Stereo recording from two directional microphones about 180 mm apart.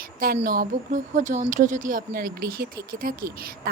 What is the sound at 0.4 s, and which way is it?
Speech, 50° right (ahead or behind).